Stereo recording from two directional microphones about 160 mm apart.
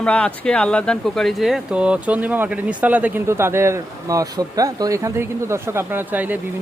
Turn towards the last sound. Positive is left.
turn(degrees=-10)  # may be behind; listen again after turning